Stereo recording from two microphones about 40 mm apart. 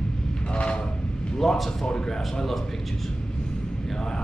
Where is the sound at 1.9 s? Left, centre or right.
Centre.